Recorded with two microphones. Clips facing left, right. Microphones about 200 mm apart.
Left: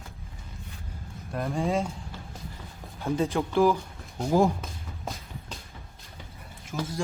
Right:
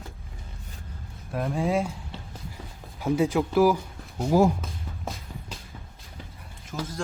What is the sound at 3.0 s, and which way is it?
Speech, 10° right (ahead or behind).